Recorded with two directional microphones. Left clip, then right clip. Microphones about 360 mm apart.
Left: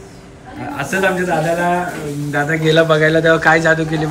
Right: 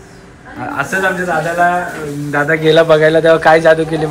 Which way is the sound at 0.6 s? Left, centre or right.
Centre.